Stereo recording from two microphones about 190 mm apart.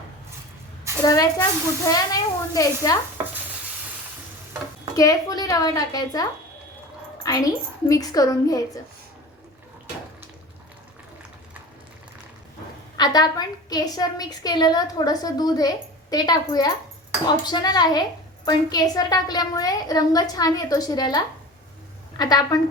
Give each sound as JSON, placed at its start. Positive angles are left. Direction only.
{"t": 1.0, "sound": "a woman's voice", "side_deg": 20}
{"t": 4.9, "sound": "a woman's voice", "side_deg": 20}
{"t": 13.0, "sound": "a woman's voice", "side_deg": 20}
{"t": 22.2, "sound": "a woman's voice", "side_deg": 20}